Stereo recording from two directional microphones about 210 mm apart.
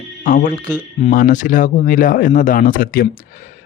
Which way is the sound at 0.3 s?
40° left (ahead or behind).